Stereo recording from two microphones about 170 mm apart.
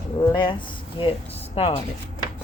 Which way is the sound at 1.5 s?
35° left (ahead or behind).